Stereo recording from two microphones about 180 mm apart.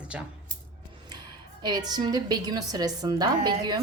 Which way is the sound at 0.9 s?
25° right (ahead or behind).